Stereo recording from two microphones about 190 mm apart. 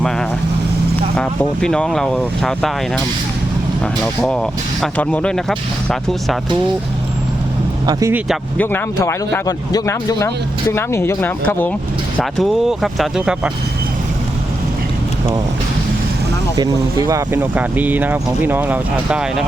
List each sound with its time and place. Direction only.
1.1 s speech: 5° left (ahead or behind)
4.0 s speech: 5° left (ahead or behind)
7.9 s speech: 20° right (ahead or behind)
8.5 s a man's voice: 10° left (ahead or behind)
12.2 s speech: centre (ahead or behind)
17.1 s speech: 15° right (ahead or behind)